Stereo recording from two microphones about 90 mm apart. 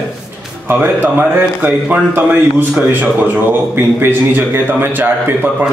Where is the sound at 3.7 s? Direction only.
20° right (ahead or behind).